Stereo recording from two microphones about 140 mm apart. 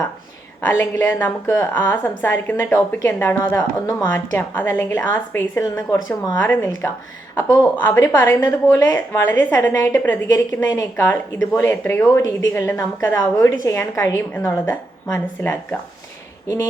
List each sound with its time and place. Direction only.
0.6 s a woman's voice: 15° left (ahead or behind)
7.8 s a woman's voice: 15° left (ahead or behind)